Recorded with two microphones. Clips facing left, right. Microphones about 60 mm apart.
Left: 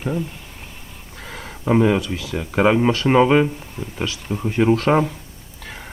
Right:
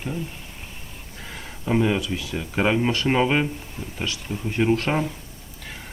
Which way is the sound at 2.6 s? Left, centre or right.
Left.